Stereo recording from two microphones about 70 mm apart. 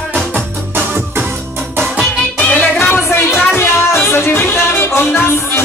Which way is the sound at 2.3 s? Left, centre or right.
Left.